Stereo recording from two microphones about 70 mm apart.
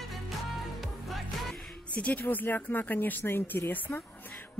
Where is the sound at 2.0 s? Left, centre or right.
Left.